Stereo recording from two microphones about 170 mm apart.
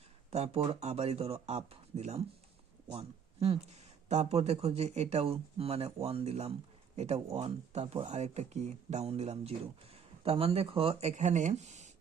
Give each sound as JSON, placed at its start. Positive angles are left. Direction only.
{"t": 0.3, "sound": "speech", "side_deg": -40}